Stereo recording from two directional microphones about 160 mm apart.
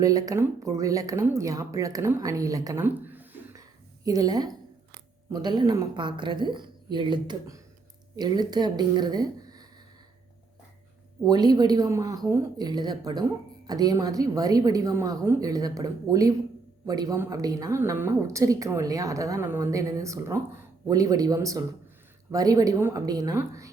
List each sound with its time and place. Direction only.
0.0 s a woman's voice: 20° right (ahead or behind)
4.0 s a woman's voice: 25° right (ahead or behind)
11.3 s a woman's voice: 25° right (ahead or behind)